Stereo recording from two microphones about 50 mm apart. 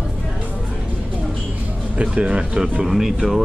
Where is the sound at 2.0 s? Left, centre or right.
Right.